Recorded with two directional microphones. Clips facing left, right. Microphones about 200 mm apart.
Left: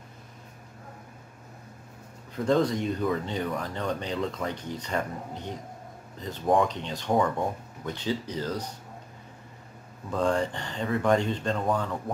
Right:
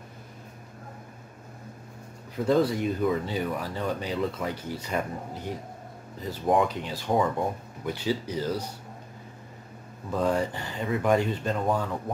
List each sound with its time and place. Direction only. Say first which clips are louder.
2.4 s speech: right 1 dB; 5° right (ahead or behind)
10.1 s speech: even; 10° right (ahead or behind)